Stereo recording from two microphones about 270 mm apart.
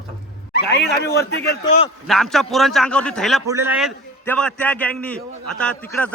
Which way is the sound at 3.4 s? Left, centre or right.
Centre.